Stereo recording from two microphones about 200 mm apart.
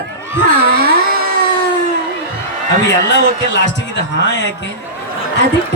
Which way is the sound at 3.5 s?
60° left (ahead or behind).